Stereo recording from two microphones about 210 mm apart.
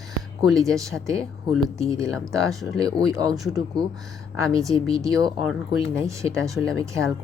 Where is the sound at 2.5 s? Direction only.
Centre (ahead or behind).